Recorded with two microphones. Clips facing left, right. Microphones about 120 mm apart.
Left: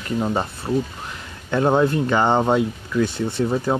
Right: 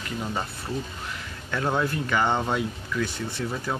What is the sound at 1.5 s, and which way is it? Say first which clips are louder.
Speech: left 8 dB; 30° left (ahead or behind).